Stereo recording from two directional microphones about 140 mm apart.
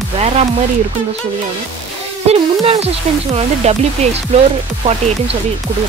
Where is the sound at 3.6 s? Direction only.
50° right (ahead or behind).